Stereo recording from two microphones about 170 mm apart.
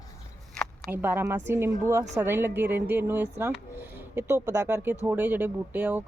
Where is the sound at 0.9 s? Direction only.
15° right (ahead or behind).